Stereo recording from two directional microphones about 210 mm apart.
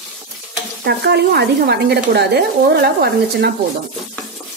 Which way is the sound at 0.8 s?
50° right (ahead or behind).